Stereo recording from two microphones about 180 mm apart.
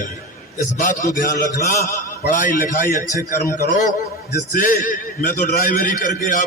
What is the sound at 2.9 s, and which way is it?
Speech, 20° right (ahead or behind).